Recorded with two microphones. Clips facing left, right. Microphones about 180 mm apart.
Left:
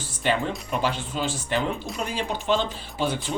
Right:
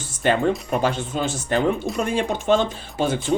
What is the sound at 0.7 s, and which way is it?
Speech, 45° right (ahead or behind).